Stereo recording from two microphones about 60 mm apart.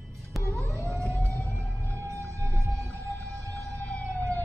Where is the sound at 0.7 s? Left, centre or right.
Right.